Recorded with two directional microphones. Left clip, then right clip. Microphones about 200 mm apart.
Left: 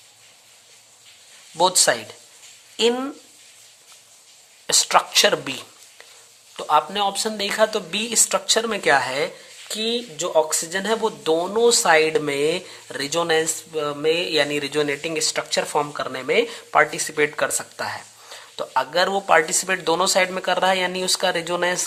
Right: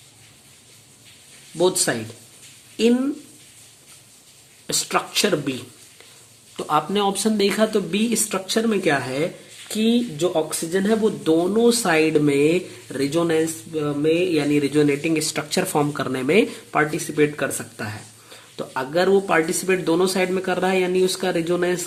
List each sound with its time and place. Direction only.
1.5 s speech: 40° left (ahead or behind)
4.6 s speech: 35° left (ahead or behind)
6.6 s speech: 15° left (ahead or behind)
16.7 s speech: 30° left (ahead or behind)